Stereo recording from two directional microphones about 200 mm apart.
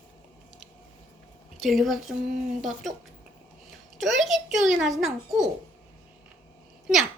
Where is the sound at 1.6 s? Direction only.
Centre (ahead or behind).